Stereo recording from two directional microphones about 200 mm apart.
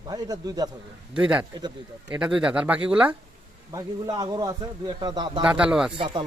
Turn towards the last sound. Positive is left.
turn(degrees=-25)  # may be behind; listen again after turning